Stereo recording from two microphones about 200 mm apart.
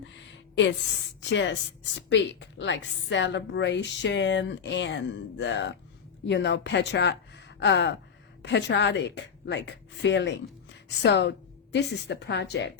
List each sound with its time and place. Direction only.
1.3 s a woman's voice: 65° left (ahead or behind)